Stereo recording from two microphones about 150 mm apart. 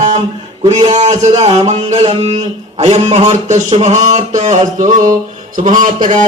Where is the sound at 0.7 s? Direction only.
45° right (ahead or behind).